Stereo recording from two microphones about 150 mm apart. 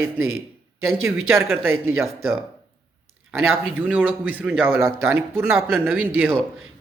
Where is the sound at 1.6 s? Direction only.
15° right (ahead or behind).